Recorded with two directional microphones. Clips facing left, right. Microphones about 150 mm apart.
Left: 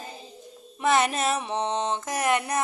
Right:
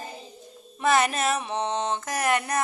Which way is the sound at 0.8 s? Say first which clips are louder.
Even; 20° left (ahead or behind).